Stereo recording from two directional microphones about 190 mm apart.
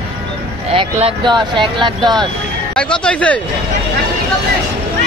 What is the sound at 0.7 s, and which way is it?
Speech, 25° right (ahead or behind).